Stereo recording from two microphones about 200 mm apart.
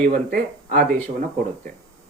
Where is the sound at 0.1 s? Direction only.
45° right (ahead or behind).